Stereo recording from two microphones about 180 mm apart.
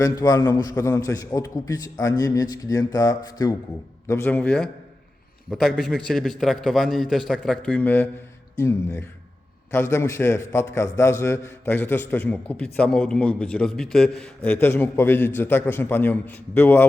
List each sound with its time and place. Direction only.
0.0 s a man's voice: 20° left (ahead or behind)